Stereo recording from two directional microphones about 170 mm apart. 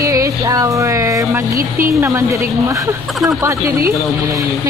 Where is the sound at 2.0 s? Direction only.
15° right (ahead or behind).